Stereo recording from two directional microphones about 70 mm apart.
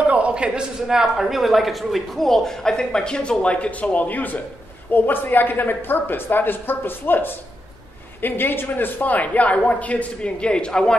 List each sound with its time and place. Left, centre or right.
0.0 s a man's voice: centre